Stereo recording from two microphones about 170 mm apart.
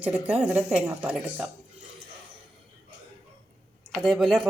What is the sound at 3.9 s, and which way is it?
Speech, centre (ahead or behind).